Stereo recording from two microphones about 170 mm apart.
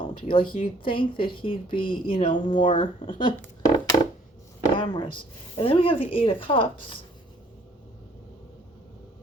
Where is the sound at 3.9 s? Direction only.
30° left (ahead or behind).